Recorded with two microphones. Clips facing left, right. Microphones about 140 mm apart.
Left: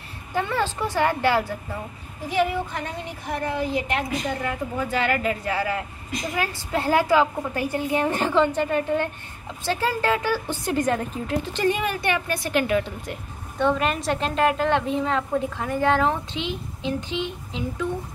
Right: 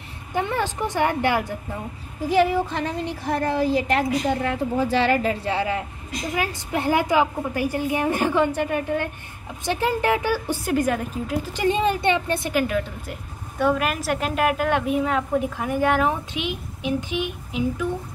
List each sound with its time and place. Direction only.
0.3 s a woman's voice: 15° right (ahead or behind)
2.2 s a woman's voice: 35° right (ahead or behind); by 11.7 s 10° right (ahead or behind)
11.7 s a woman's voice: 25° right (ahead or behind)
12.5 s a woman's voice: centre (ahead or behind)